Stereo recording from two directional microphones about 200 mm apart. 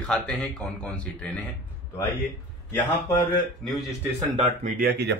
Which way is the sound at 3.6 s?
5° left (ahead or behind).